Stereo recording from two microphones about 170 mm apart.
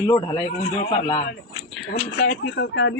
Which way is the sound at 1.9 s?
80° left.